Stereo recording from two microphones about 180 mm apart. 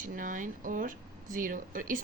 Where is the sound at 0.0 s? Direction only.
50° right (ahead or behind).